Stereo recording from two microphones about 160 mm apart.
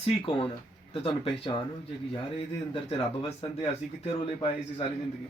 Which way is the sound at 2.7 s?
35° left (ahead or behind).